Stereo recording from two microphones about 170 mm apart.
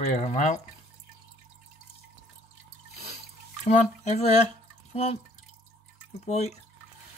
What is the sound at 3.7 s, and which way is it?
Speech, 40° left (ahead or behind).